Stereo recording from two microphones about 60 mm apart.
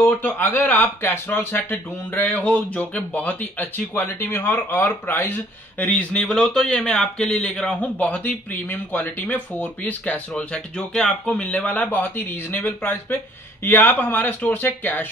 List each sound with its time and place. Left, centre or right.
0.0 s speech: left